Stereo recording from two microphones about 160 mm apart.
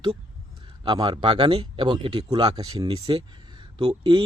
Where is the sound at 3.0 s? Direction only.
35° right (ahead or behind).